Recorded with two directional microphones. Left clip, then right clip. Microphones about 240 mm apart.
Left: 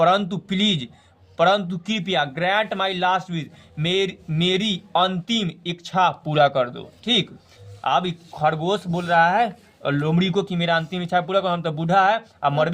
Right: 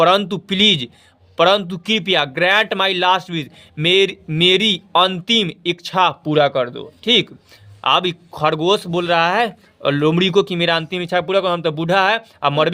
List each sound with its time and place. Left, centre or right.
0.0 s a man's voice: right